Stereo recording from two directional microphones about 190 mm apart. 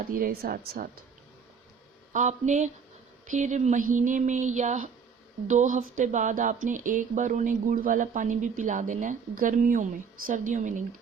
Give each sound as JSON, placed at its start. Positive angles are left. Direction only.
{"t": 0.0, "sound": "speech", "side_deg": -50}
{"t": 2.1, "sound": "speech", "side_deg": -40}